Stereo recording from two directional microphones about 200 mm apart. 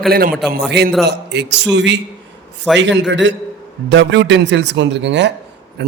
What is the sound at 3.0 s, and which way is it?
A man's voice, 60° right (ahead or behind).